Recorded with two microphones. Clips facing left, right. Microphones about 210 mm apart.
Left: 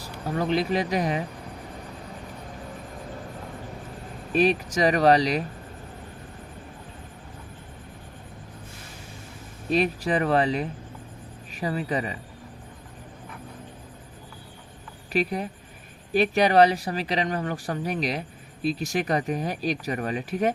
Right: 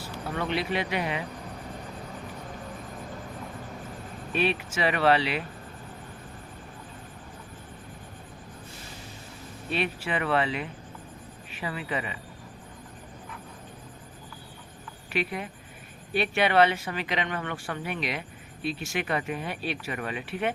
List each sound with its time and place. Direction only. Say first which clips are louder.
0.0 s speech: left 4 dB; 35° left (ahead or behind)
4.3 s speech: left 6 dB; 40° left (ahead or behind)
9.6 s speech: left 6 dB; 40° left (ahead or behind)
15.1 s speech: left 5 dB; 40° left (ahead or behind)